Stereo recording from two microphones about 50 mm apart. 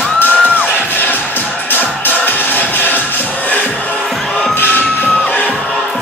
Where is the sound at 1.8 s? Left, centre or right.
Left.